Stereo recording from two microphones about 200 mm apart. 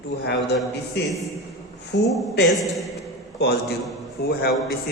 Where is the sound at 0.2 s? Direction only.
55° left (ahead or behind).